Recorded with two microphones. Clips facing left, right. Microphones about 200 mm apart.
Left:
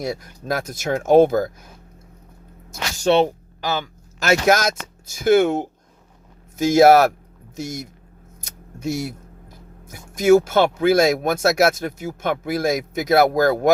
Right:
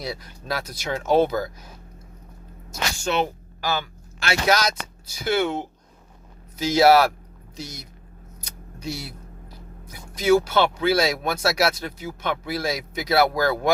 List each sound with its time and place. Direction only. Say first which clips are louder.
0.0 s speech: left 6 dB; 50° left (ahead or behind)
3.0 s speech: left 8 dB; 30° left (ahead or behind)
3.6 s a sound: left 2 dB; 20° left (ahead or behind)
4.2 s speech: left 5 dB; 45° left (ahead or behind)